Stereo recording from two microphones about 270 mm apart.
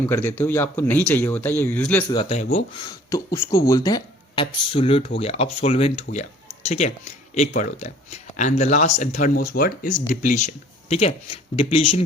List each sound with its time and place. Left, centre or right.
0.1 s speech: centre
2.0 s speech: left
3.5 s speech: centre